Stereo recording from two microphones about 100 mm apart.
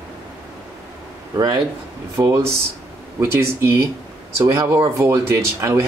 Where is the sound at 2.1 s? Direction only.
30° right (ahead or behind).